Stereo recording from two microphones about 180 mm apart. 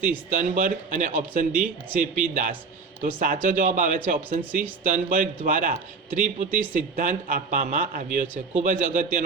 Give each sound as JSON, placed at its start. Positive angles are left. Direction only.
{"t": 0.0, "sound": "speech", "side_deg": -45}